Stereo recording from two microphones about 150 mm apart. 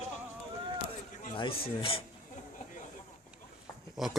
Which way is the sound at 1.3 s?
35° left (ahead or behind).